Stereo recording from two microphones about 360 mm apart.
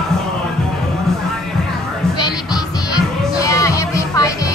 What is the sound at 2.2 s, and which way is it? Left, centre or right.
Music, centre.